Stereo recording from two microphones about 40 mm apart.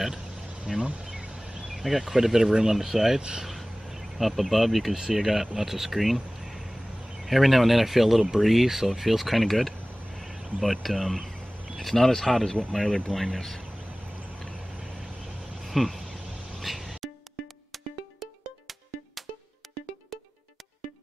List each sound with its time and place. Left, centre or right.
0.7 s speech: centre
1.0 s a sound: right
1.7 s speech: centre
3.2 s speech: right
4.0 s speech: centre
15.0 s vehicle: centre
16.6 s music: centre
18.2 s music: centre